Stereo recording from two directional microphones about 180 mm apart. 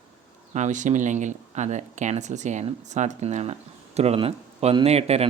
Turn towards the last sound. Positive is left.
turn(degrees=-35)  # may be behind; listen again after turning